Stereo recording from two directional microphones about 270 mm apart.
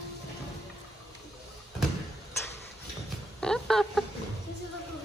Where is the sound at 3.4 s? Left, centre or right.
Centre.